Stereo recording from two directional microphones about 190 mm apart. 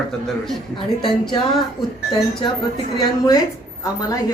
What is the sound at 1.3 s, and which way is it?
Music, 25° left (ahead or behind).